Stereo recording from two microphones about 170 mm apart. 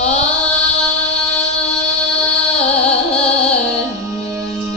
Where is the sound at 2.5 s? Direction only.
40° left (ahead or behind).